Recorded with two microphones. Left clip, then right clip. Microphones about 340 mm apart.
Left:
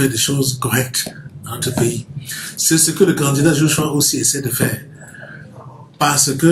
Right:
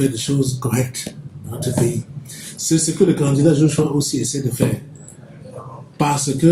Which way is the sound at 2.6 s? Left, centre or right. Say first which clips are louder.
Left 2 dB; left.